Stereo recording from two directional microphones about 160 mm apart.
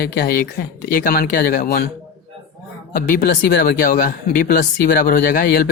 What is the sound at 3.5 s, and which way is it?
Speech, 65° left (ahead or behind).